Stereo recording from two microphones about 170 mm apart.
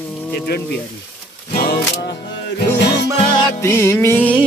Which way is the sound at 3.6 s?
15° left (ahead or behind).